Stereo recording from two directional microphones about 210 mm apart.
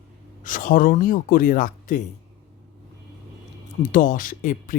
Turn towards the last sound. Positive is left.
turn(degrees=40)  # may be behind; listen again after turning